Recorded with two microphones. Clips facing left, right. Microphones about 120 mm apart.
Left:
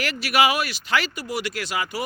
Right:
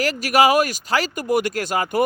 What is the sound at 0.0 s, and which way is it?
Speech, 40° right (ahead or behind).